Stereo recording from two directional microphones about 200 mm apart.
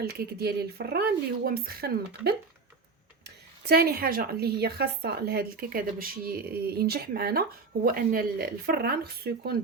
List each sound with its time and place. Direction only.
0.0 s a woman's voice: 50° right (ahead or behind)